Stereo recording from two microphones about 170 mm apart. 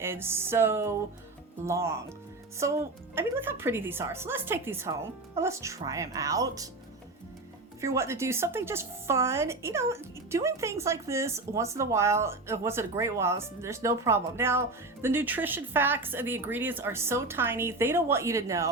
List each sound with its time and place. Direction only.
0.0 s a woman's voice: 15° right (ahead or behind)
7.8 s a woman's voice: 15° right (ahead or behind)